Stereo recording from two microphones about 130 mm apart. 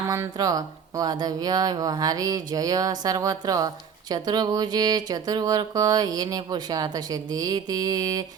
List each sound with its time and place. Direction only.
0.1 s speech: 25° right (ahead or behind)